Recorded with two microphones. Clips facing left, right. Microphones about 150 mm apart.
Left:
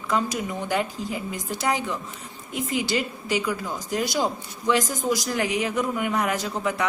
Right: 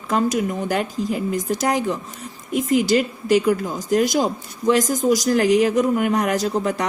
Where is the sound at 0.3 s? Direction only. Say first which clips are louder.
Right 6 dB; 45° right (ahead or behind).